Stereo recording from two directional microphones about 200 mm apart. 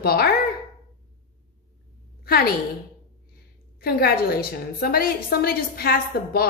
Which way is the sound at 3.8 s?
50° left (ahead or behind).